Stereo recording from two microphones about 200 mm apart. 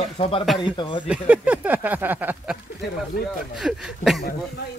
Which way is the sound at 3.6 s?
Centre (ahead or behind).